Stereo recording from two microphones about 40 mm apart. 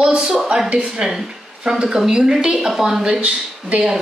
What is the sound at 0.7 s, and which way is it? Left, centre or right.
Speech, right.